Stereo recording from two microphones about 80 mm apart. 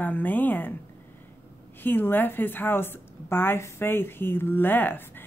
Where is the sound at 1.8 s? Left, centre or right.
Left.